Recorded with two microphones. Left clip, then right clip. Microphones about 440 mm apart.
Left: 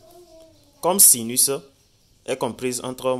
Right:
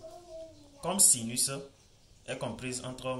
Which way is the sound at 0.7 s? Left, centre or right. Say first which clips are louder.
Left 10 dB; centre.